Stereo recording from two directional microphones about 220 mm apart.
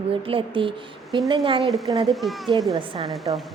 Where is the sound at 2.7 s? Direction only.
25° right (ahead or behind).